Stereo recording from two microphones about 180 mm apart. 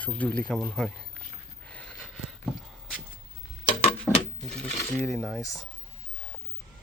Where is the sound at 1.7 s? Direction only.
5° left (ahead or behind).